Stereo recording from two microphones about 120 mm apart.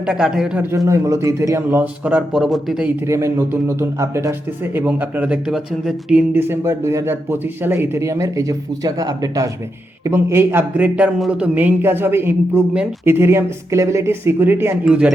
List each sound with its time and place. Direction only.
0.0 s a man's voice: 5° right (ahead or behind)
0.9 s speech: 25° right (ahead or behind)
1.8 s speech: 10° right (ahead or behind)
3.1 s a man's voice: 25° right (ahead or behind); by 6.4 s 5° right (ahead or behind)
6.5 s a man's voice: 20° right (ahead or behind)